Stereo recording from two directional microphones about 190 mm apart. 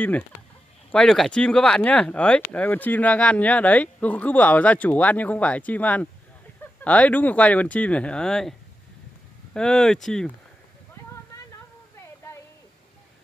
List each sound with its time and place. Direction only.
0.9 s speech: centre (ahead or behind)